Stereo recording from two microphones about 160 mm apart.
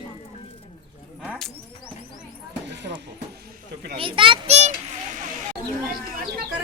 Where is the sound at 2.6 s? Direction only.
90° right.